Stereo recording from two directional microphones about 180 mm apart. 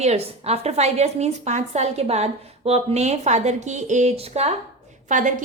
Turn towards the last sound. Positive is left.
turn(degrees=-45)  # may be behind; listen again after turning